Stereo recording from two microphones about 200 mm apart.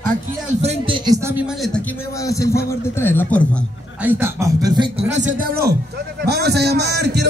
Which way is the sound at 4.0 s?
10° right (ahead or behind).